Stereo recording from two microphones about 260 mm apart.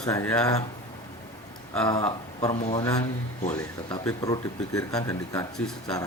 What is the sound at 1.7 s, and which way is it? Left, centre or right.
Speech, centre.